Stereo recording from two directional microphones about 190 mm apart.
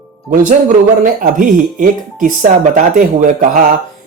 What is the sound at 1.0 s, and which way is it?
Speech, 45° right (ahead or behind).